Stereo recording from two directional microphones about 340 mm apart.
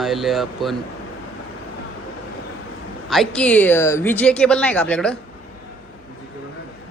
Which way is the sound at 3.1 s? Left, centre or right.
Centre.